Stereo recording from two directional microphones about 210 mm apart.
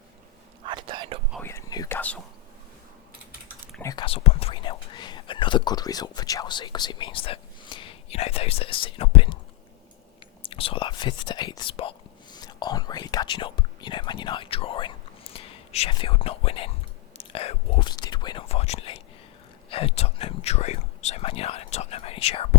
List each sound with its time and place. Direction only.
0.6 s whispering: 20° right (ahead or behind)
1.4 s whispering: 10° left (ahead or behind)
3.8 s speech: 20° left (ahead or behind)
10.4 s whispering: 25° left (ahead or behind)